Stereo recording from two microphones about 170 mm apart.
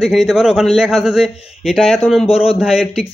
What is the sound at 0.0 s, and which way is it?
A man's voice, centre (ahead or behind).